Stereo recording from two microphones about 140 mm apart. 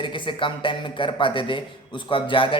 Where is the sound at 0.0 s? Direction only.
35° left (ahead or behind).